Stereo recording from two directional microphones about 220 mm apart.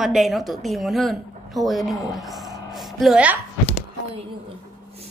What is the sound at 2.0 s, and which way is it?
Music, centre (ahead or behind).